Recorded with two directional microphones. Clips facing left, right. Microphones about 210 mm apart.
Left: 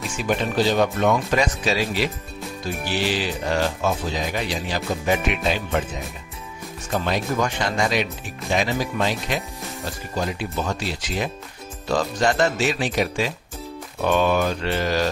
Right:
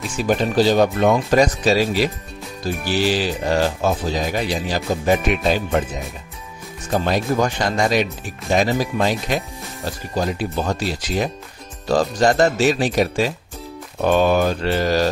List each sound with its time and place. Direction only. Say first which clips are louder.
0.2 s speech: right 4 dB; 35° right (ahead or behind)
6.9 s speech: right 4 dB; 35° right (ahead or behind)